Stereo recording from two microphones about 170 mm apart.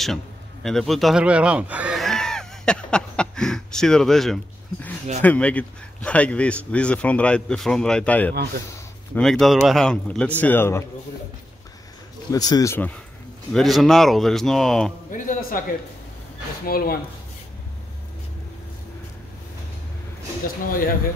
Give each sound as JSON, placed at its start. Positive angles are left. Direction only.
{"t": 0.7, "sound": "a man's voice", "side_deg": 0}
{"t": 12.3, "sound": "a man's voice", "side_deg": 20}
{"t": 15.0, "sound": "a man's voice", "side_deg": 50}
{"t": 16.6, "sound": "speech", "side_deg": 60}
{"t": 20.4, "sound": "speech", "side_deg": 60}